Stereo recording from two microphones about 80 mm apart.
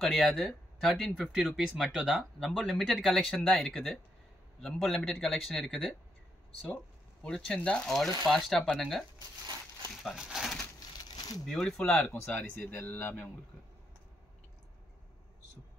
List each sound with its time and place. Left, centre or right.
0.0 s speech: centre
7.2 s speech: centre
10.2 s speech: centre
11.0 s a sound: left
11.4 s speech: centre
11.9 s speech: left